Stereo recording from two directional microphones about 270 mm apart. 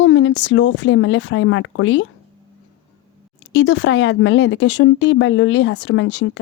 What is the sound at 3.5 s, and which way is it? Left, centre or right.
Speech, left.